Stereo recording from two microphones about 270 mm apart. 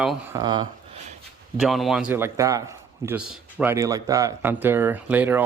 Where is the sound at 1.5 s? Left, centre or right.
Centre.